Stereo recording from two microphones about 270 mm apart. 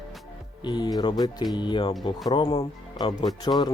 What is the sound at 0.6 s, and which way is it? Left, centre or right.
Speech, centre.